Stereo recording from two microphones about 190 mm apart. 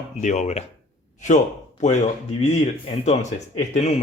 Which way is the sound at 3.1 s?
35° left (ahead or behind).